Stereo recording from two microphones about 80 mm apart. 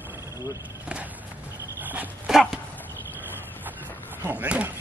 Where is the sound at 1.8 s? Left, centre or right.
Right.